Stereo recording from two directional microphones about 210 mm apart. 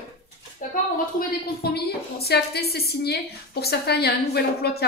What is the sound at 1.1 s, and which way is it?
A woman's voice, 50° left (ahead or behind).